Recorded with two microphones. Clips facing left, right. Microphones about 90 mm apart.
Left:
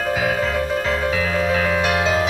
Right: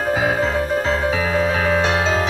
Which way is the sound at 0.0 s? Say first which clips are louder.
Right 2 dB; 25° right (ahead or behind).